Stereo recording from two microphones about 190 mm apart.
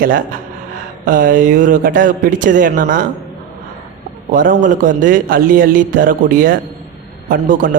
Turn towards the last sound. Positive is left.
turn(degrees=-45)  # may be behind; listen again after turning